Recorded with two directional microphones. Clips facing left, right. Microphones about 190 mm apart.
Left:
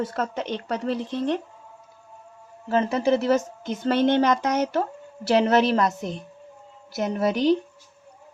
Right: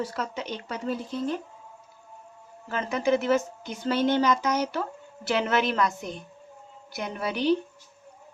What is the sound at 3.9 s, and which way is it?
Speech, 60° left (ahead or behind).